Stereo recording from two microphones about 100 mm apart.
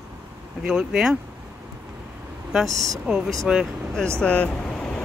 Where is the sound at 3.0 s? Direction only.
5° right (ahead or behind).